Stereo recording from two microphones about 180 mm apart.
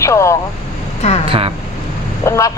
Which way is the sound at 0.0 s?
15° left (ahead or behind).